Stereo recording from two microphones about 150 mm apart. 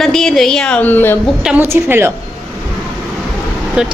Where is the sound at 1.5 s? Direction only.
15° right (ahead or behind).